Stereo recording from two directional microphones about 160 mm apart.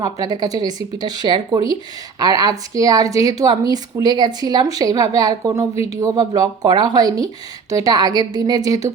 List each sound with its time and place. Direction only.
0.0 s speech: 25° right (ahead or behind)